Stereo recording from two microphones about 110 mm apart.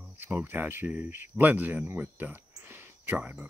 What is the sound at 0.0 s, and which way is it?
Speech, 15° right (ahead or behind).